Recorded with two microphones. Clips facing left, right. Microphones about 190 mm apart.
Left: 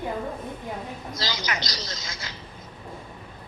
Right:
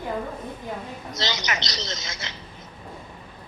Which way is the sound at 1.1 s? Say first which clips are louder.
Right 3 dB; 25° right (ahead or behind).